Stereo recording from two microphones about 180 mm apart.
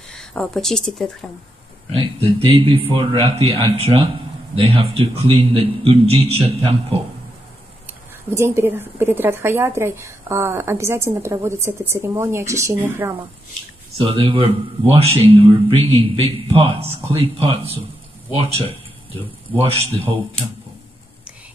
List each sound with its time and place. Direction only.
0.1 s speech: 5° left (ahead or behind)
1.9 s speech: 30° right (ahead or behind)
8.3 s speech: 15° right (ahead or behind)
13.9 s speech: 30° right (ahead or behind)
19.5 s speech: 30° right (ahead or behind)